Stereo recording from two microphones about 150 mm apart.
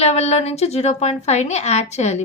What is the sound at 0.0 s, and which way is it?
A woman's voice, 45° left (ahead or behind).